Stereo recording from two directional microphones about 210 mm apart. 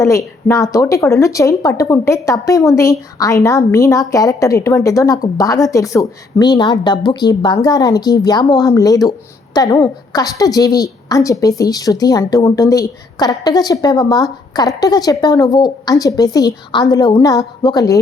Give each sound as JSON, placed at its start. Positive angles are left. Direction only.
{"t": 0.0, "sound": "a woman's voice", "side_deg": 15}